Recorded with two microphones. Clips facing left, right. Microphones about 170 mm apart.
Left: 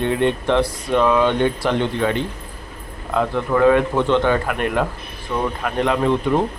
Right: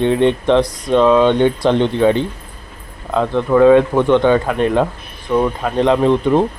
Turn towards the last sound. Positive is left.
turn(degrees=-20)  # may be behind; listen again after turning